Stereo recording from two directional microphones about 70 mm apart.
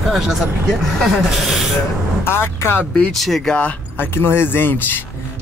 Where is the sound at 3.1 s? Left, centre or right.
Centre.